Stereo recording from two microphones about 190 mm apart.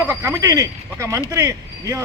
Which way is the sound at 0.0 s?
10° right (ahead or behind).